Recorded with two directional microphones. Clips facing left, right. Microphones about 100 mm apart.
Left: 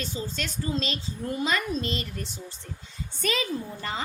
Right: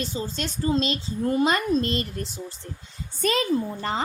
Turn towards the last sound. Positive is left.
turn(degrees=-40)  # may be behind; listen again after turning